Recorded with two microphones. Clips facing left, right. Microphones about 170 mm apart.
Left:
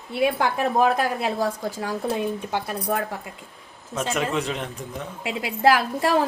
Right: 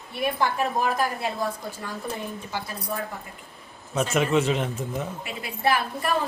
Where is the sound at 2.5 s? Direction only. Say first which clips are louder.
Left 6 dB; 65° left (ahead or behind).